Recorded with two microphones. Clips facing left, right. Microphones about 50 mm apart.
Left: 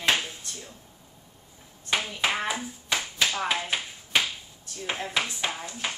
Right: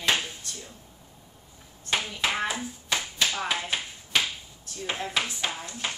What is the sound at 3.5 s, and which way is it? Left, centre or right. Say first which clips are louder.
Tap: left 1 dB; left.